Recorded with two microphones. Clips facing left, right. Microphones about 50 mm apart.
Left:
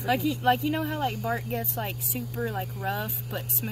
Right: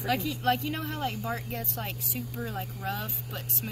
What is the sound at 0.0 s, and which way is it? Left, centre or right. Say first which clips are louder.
Speech: left 4 dB; centre.